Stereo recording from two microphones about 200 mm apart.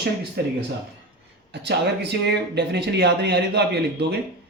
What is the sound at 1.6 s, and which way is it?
Speech, 55° right (ahead or behind).